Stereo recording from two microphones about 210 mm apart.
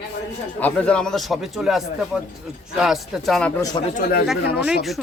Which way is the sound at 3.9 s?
45° left (ahead or behind).